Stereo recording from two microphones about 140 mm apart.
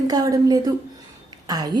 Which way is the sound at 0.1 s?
25° right (ahead or behind).